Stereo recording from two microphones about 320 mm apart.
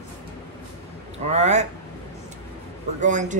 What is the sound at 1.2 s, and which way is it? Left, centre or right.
Speech, right.